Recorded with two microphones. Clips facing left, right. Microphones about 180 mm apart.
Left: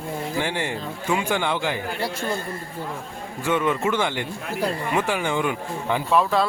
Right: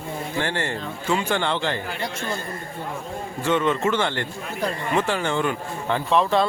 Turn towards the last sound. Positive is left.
turn(degrees=5)  # may be behind; listen again after turning